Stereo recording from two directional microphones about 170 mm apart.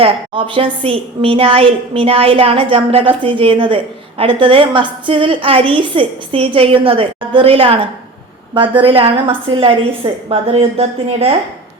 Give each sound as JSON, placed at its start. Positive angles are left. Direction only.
{"t": 0.0, "sound": "a woman's voice", "side_deg": -30}